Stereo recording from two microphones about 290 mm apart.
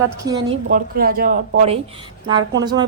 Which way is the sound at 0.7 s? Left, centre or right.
Right.